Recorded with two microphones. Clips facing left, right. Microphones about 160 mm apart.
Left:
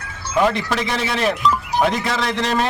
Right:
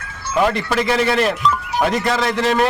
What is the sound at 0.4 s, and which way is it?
Speech, centre (ahead or behind).